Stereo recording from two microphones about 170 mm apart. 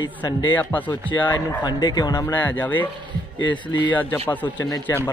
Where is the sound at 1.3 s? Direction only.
25° left (ahead or behind).